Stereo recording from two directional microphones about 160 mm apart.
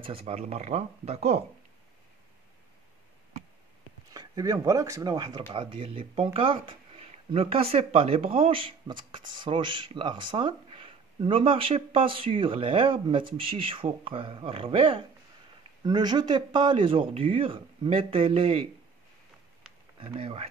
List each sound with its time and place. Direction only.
0.0 s speech: 35° right (ahead or behind)
4.1 s speech: 25° right (ahead or behind)
20.0 s speech: 35° right (ahead or behind)